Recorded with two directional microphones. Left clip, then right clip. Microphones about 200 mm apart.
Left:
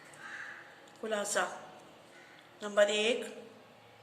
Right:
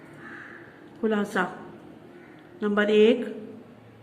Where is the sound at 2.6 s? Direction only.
15° right (ahead or behind).